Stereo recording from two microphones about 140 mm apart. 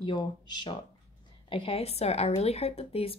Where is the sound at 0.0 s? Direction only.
35° left (ahead or behind).